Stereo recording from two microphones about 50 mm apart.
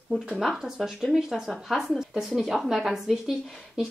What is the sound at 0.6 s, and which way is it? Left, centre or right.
A woman's voice, centre.